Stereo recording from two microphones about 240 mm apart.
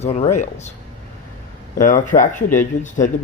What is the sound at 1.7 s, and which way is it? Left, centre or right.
Speech, left.